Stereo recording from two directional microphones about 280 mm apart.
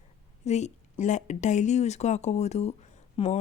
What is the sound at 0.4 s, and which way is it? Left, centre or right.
Speech, left.